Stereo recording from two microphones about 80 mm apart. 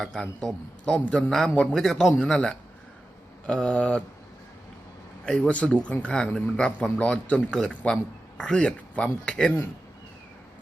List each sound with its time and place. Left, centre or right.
0.0 s speech: centre
5.2 s speech: centre